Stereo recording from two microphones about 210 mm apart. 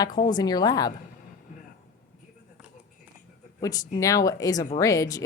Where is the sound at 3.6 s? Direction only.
15° left (ahead or behind).